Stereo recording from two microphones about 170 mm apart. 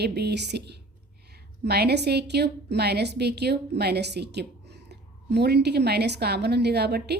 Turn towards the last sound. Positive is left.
turn(degrees=-70)  # may be behind; listen again after turning